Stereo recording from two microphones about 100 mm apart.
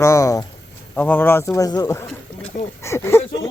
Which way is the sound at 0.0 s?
30° left (ahead or behind).